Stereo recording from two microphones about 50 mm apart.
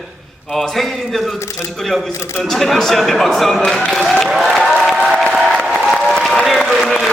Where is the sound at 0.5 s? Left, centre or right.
Centre.